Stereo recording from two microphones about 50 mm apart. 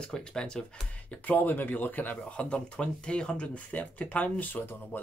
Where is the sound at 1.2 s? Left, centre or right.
Left.